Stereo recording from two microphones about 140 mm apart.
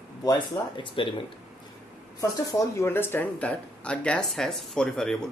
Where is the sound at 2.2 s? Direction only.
25° left (ahead or behind); by 5.3 s 5° left (ahead or behind).